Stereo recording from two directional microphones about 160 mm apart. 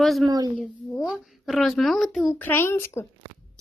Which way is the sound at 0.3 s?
25° right (ahead or behind).